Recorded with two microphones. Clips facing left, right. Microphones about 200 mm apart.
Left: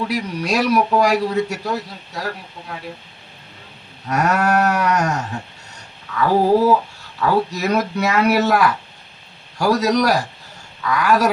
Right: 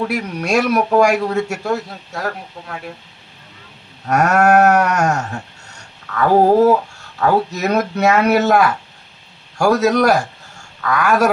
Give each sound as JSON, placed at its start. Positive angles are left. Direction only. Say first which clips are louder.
{"t": 0.1, "sound": "a man's voice", "louder": "right 3 dB", "side_deg": -50}
{"t": 4.0, "sound": "a man's voice", "louder": "right 4 dB", "side_deg": -50}